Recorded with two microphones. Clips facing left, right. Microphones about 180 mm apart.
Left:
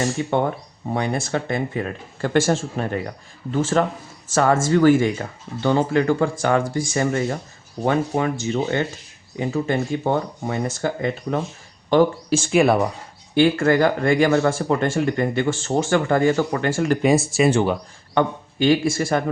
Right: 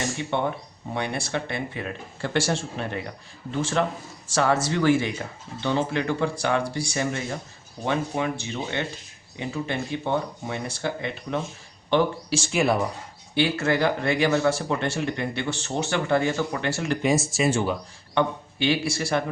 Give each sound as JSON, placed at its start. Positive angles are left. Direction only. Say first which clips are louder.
{"t": 0.9, "sound": "speech", "louder": "left 5 dB", "side_deg": 45}